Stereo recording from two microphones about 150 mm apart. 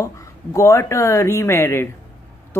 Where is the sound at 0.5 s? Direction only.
20° left (ahead or behind).